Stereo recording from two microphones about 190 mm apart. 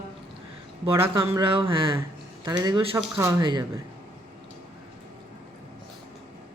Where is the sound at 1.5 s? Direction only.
25° right (ahead or behind).